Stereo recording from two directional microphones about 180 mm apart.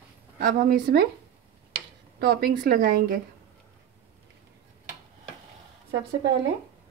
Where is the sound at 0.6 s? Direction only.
55° right (ahead or behind).